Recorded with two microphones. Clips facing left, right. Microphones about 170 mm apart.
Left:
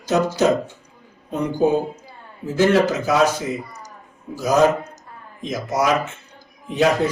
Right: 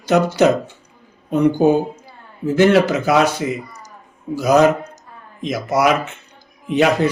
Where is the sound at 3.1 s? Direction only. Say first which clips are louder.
Right 2 dB; 70° right (ahead or behind).